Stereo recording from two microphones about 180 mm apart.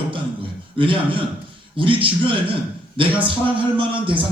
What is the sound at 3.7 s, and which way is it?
Speech, 30° right (ahead or behind).